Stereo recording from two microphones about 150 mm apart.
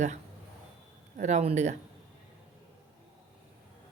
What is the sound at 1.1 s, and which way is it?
Speech, 50° right (ahead or behind).